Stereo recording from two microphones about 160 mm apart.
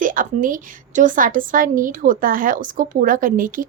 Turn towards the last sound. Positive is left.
turn(degrees=-60)  # may be behind; listen again after turning